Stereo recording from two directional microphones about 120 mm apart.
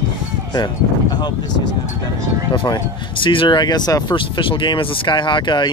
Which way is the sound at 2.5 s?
40° left (ahead or behind).